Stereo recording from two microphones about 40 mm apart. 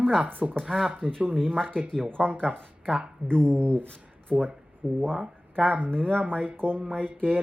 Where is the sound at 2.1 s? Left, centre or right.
Right.